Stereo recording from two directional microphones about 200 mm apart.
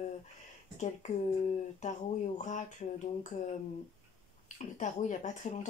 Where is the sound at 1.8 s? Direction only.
35° left (ahead or behind).